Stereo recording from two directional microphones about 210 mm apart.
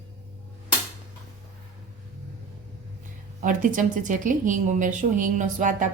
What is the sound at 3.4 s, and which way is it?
Speech, 40° right (ahead or behind).